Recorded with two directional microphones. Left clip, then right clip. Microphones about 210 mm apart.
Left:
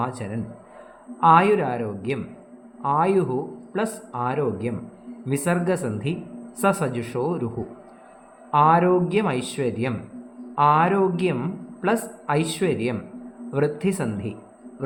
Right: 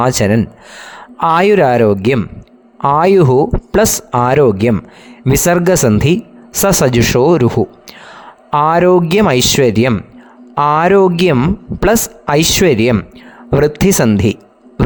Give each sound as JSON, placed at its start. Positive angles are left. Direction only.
{"t": 0.0, "sound": "a man's voice", "side_deg": -55}